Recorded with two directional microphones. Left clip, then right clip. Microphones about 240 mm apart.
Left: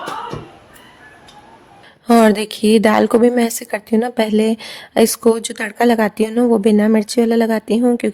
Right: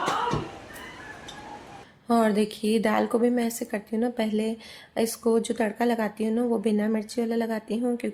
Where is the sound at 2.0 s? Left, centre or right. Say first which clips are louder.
Left 11 dB; left.